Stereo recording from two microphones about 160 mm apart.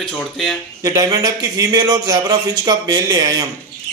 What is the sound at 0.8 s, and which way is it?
A man's voice, 20° right (ahead or behind).